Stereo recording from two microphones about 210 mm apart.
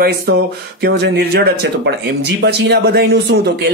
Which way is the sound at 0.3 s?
50° right (ahead or behind).